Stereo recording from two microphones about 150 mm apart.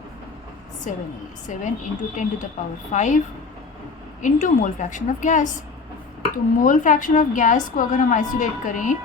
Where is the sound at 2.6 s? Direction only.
55° left (ahead or behind).